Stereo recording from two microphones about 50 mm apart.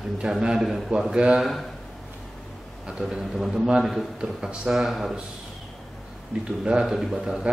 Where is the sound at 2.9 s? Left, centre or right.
Centre.